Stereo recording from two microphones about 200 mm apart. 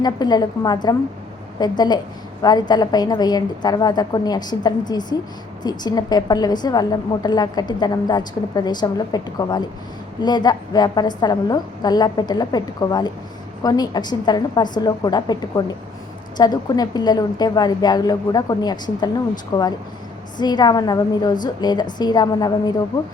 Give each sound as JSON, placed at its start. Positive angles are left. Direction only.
{"t": 0.0, "sound": "a woman's voice", "side_deg": 20}